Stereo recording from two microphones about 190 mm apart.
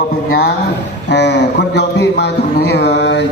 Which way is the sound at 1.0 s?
65° left (ahead or behind).